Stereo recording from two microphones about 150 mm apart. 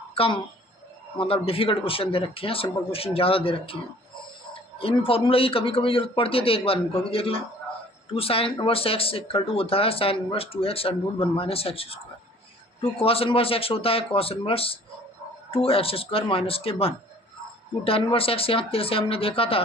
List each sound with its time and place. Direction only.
0.1 s a sound: 40° left (ahead or behind)
1.2 s speech: 40° left (ahead or behind)
4.8 s speech: 40° left (ahead or behind)